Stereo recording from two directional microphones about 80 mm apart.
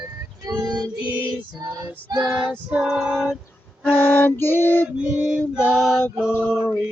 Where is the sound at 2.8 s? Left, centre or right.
Centre.